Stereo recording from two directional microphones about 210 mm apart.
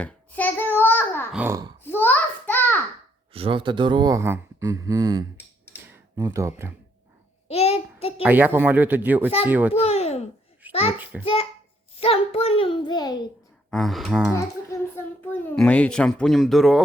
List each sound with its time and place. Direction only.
0.0 s a sound: 5° left (ahead or behind)
1.3 s speech: 5° right (ahead or behind)
1.8 s a sound: 10° left (ahead or behind)
3.3 s speech: 25° right (ahead or behind)
7.4 s child singing: 30° left (ahead or behind)
8.2 s speech: 10° right (ahead or behind)
9.7 s a child's voice: 30° left (ahead or behind)
11.1 s a child's voice: 5° right (ahead or behind)
11.9 s a child's voice: 25° left (ahead or behind)
13.7 s a child's voice: centre (ahead or behind)
14.9 s a child's voice: 10° left (ahead or behind)